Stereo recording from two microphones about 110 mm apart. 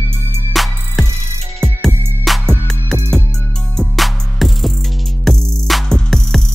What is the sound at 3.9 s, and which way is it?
Music, centre (ahead or behind).